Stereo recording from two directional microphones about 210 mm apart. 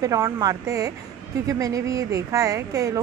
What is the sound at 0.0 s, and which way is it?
Speech, 15° right (ahead or behind).